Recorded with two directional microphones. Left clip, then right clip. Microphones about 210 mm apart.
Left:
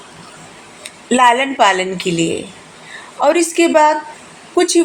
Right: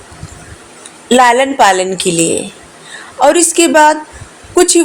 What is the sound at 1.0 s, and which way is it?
Speech, 30° right (ahead or behind).